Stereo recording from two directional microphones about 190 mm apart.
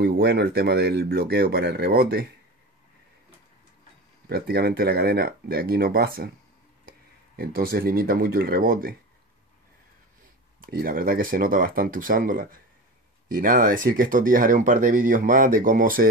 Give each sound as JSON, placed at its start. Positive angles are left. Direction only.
{"t": 0.0, "sound": "speech", "side_deg": -55}
{"t": 4.3, "sound": "speech", "side_deg": -55}
{"t": 7.3, "sound": "speech", "side_deg": -50}
{"t": 10.6, "sound": "speech", "side_deg": -50}